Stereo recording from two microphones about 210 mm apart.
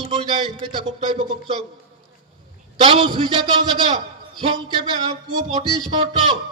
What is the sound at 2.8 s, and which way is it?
A man's voice, 25° right (ahead or behind).